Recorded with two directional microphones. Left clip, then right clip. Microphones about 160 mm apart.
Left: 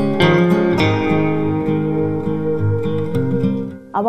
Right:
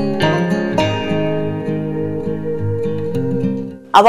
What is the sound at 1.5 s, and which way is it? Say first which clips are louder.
Music: left 3 dB; 25° left (ahead or behind).